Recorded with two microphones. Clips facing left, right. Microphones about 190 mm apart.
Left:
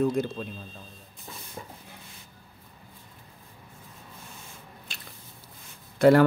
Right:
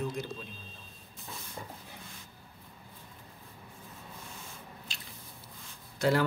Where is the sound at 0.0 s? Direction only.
55° left (ahead or behind).